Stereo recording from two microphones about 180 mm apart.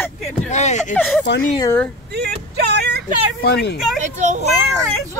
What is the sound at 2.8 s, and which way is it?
Vehicle, 65° right (ahead or behind).